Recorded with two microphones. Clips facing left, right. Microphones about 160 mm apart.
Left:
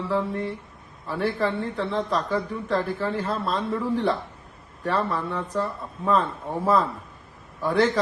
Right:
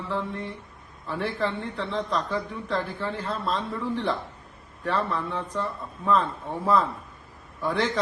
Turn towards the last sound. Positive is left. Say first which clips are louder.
# left 4 dB
turn(degrees=0)  # may be behind; listen again after turning